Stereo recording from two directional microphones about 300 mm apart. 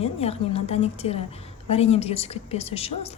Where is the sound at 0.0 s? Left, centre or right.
Centre.